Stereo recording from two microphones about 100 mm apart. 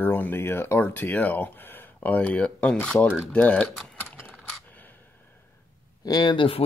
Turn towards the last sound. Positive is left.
turn(degrees=55)  # may be behind; listen again after turning